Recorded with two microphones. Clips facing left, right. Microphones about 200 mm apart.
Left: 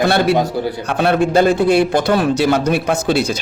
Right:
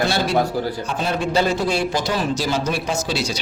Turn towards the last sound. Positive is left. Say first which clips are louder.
# left 7 dB
turn(degrees=55)  # may be behind; listen again after turning